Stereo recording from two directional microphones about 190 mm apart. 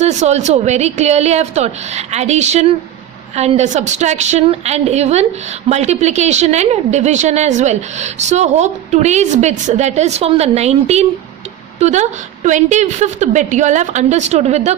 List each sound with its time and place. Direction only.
0.0 s speech: 35° right (ahead or behind)